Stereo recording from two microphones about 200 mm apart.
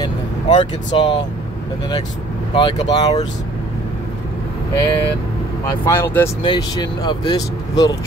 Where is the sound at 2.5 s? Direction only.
20° left (ahead or behind).